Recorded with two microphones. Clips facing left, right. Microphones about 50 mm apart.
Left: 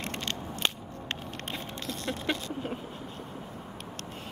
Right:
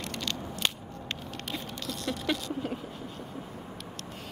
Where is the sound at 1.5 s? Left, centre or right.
Left.